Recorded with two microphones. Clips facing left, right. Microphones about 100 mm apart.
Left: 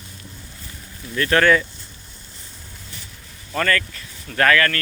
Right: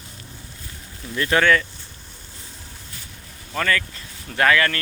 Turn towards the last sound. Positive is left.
turn(degrees=-15)  # may be behind; listen again after turning